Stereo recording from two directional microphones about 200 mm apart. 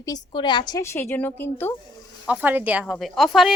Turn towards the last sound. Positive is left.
turn(degrees=0)  # may be behind; listen again after turning